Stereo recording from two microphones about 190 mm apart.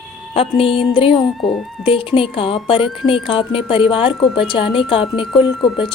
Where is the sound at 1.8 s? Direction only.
30° left (ahead or behind).